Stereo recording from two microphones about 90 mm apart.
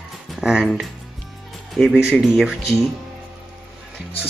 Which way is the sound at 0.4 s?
5° right (ahead or behind).